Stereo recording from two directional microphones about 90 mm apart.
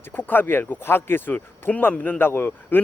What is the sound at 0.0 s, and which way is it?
Speech, 25° left (ahead or behind).